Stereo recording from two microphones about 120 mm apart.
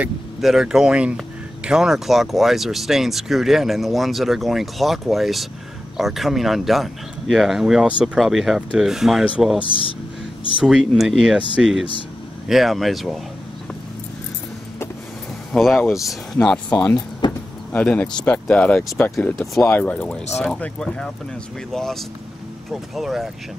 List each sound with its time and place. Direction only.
0.4 s speech: 5° right (ahead or behind)
9.6 s speech: 50° left (ahead or behind)
10.6 s speech: centre (ahead or behind)
15.5 s speech: 5° left (ahead or behind)
17.2 s vehicle: 40° left (ahead or behind)
17.7 s speech: 10° left (ahead or behind)
19.7 s speech: 15° left (ahead or behind); by 23.3 s centre (ahead or behind)